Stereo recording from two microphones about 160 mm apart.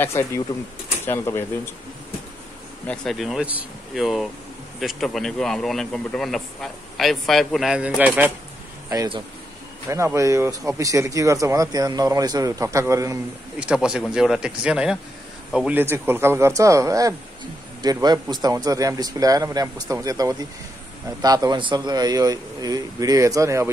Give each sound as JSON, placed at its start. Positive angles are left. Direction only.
{"t": 0.0, "sound": "speech", "side_deg": 15}
{"t": 2.9, "sound": "speech", "side_deg": 0}
{"t": 8.8, "sound": "speech", "side_deg": -20}
{"t": 13.6, "sound": "speech", "side_deg": -5}